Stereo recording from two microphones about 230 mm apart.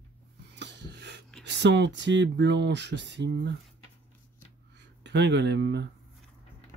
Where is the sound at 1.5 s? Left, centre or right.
Right.